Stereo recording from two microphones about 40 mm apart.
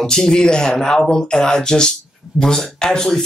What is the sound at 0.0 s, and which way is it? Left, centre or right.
Speech, centre.